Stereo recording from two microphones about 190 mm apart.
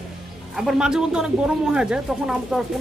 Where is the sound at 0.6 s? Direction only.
5° right (ahead or behind).